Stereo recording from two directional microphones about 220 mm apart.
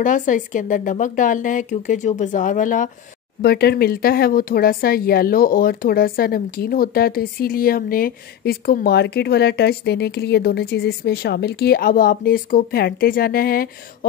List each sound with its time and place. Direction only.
0.0 s speech: 35° left (ahead or behind)
3.4 s a woman's voice: 45° left (ahead or behind)